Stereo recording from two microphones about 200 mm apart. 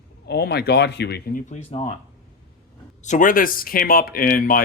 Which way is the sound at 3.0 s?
40° left (ahead or behind).